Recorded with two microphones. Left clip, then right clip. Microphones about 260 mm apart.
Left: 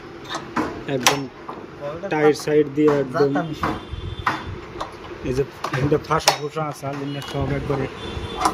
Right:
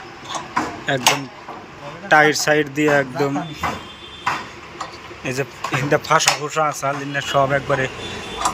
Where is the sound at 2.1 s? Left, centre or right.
Centre.